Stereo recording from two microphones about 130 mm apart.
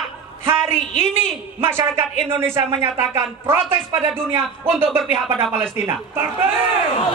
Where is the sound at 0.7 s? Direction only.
65° left (ahead or behind).